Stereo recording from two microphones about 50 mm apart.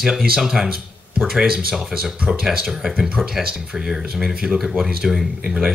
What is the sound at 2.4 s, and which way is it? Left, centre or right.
Speech, centre.